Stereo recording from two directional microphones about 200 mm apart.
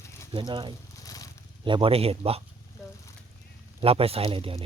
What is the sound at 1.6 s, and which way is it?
Speech, 25° right (ahead or behind).